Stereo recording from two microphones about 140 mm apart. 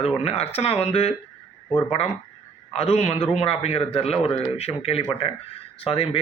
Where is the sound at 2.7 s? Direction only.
45° left (ahead or behind).